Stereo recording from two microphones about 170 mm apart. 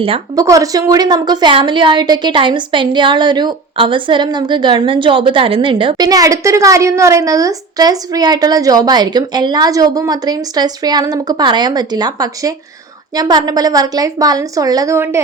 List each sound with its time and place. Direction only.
0.3 s a woman's voice: 20° right (ahead or behind)